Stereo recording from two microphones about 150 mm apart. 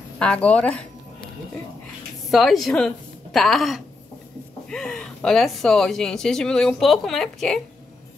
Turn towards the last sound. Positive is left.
turn(degrees=0)  # may be behind; listen again after turning